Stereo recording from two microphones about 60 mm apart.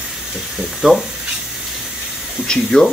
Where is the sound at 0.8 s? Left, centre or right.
Centre.